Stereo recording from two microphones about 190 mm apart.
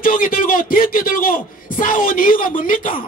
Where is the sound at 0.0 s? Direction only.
50° left (ahead or behind).